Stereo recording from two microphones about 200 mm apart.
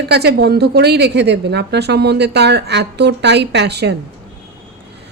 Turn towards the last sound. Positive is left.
turn(degrees=-55)  # may be behind; listen again after turning